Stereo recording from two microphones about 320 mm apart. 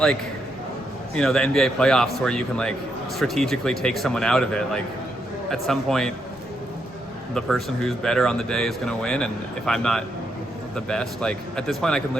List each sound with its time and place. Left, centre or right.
1.1 s speech: centre
7.3 s speech: centre